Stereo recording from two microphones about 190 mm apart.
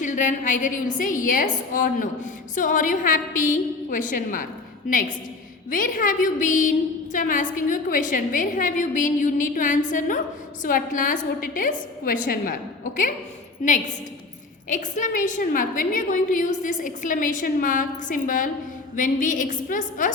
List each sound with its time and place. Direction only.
0.0 s a woman's voice: 40° left (ahead or behind)
5.7 s a woman's voice: 45° left (ahead or behind)
13.7 s a woman's voice: 40° left (ahead or behind)